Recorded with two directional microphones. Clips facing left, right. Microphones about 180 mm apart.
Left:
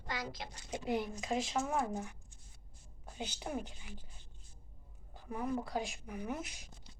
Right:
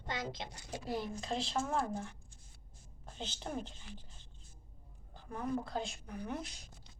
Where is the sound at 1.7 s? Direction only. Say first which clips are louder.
Even; 15° left (ahead or behind).